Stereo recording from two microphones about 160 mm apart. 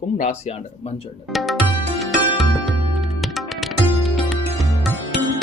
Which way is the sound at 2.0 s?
Centre (ahead or behind).